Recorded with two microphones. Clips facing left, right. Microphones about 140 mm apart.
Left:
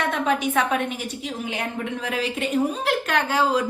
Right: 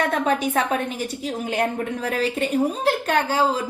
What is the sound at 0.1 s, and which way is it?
A woman's voice, 35° right (ahead or behind).